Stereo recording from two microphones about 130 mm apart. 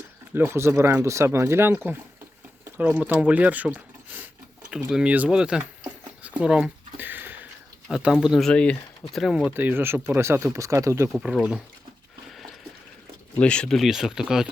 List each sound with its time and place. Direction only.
0.3 s speech: 20° right (ahead or behind)
6.2 s a sound: 5° right (ahead or behind)
7.9 s speech: 5° right (ahead or behind)
9.6 s speech: 15° right (ahead or behind)
11.1 s speech: 5° right (ahead or behind)
13.3 s speech: 10° left (ahead or behind)